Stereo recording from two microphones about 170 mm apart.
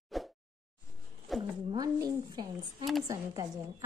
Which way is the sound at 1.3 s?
Centre (ahead or behind).